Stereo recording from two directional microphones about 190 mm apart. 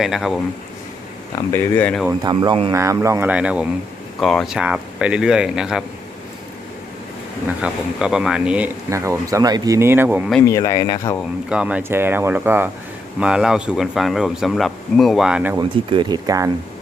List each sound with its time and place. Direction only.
0.0 s speech: centre (ahead or behind)
1.4 s speech: 10° left (ahead or behind)
2.3 s speech: 25° right (ahead or behind); by 5.8 s 5° right (ahead or behind)
7.6 s speech: 5° right (ahead or behind)
10.4 s speech: 15° left (ahead or behind)
11.4 s speech: 5° right (ahead or behind)
15.5 s speech: 25° right (ahead or behind)